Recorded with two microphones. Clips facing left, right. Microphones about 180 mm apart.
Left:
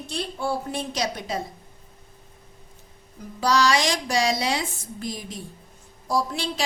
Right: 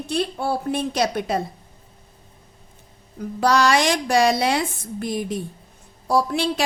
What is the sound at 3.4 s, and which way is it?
A woman's voice, 55° right (ahead or behind).